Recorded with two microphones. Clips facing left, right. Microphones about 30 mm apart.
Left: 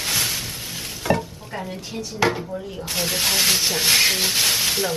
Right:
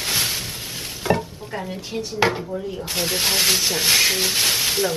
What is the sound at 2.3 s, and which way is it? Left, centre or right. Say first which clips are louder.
Speech: right 1 dB; centre.